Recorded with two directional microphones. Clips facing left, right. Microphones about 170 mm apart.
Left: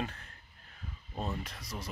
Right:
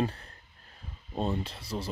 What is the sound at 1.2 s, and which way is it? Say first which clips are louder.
Speech: right 7 dB; 30° right (ahead or behind).